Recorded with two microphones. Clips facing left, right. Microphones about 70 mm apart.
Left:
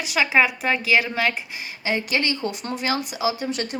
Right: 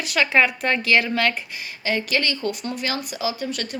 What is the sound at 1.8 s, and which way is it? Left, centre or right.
Speech, centre.